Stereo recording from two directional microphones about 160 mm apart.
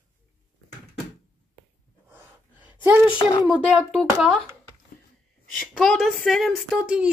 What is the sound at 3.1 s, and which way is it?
Speech, 30° left (ahead or behind).